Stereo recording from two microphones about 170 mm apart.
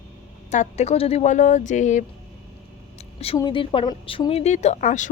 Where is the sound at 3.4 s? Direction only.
30° left (ahead or behind); by 5.1 s 45° left (ahead or behind).